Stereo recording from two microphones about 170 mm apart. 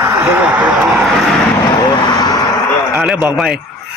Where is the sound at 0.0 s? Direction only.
15° right (ahead or behind).